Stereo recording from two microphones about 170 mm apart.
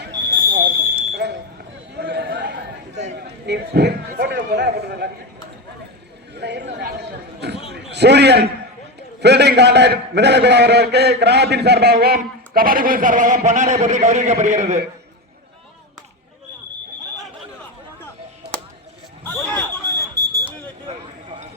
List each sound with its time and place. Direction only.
0.3 s fire alarm: 65° right (ahead or behind)
2.0 s chatter: 75° right (ahead or behind)
3.2 s a man's voice: 80° right
6.3 s chatter: 85° right
7.7 s a sound: 80° right
9.0 s a man's voice: 80° right; by 14.8 s 45° right (ahead or behind)
19.2 s a sound: 10° left (ahead or behind)